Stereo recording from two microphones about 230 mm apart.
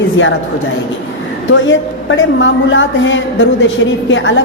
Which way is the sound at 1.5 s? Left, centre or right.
Left.